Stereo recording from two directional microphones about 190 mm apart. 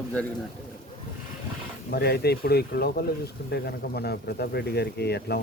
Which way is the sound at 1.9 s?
55° left (ahead or behind).